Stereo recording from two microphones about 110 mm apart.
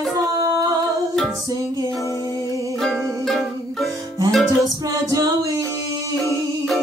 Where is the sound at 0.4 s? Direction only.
30° right (ahead or behind).